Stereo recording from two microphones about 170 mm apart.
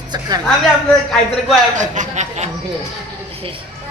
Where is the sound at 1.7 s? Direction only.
45° right (ahead or behind).